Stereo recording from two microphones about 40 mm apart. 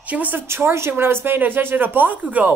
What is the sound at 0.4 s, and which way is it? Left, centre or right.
Speech, right.